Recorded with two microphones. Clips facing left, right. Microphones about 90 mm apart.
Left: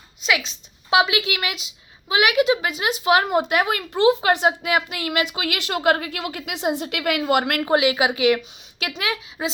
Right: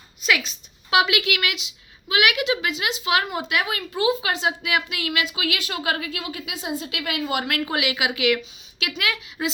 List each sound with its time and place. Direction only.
0.3 s a woman's voice: 20° left (ahead or behind); by 5.5 s 45° left (ahead or behind)
5.5 s a woman's voice: 55° left (ahead or behind)
7.6 s a woman's voice: 35° left (ahead or behind)